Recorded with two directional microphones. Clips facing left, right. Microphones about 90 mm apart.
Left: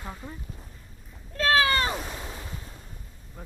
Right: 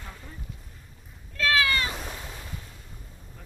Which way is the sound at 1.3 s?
35° left (ahead or behind).